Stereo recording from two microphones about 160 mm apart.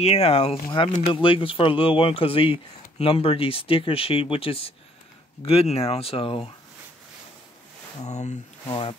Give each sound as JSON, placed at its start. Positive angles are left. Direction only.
{"t": 0.0, "sound": "speech", "side_deg": 40}
{"t": 8.0, "sound": "speech", "side_deg": 45}
{"t": 8.6, "sound": "speech", "side_deg": 30}